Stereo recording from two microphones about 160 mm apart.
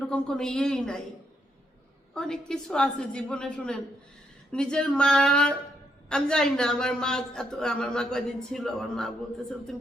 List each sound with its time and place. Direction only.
0.1 s a woman's voice: 5° left (ahead or behind)
2.1 s a woman's voice: 5° left (ahead or behind)